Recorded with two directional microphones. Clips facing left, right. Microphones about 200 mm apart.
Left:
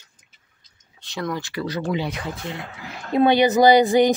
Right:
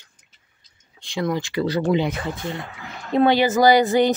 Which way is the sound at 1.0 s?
10° right (ahead or behind).